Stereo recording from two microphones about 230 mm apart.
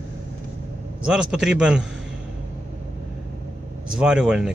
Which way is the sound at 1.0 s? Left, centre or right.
Centre.